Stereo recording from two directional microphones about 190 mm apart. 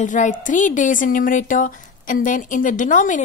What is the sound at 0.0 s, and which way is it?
A woman's voice, 40° left (ahead or behind).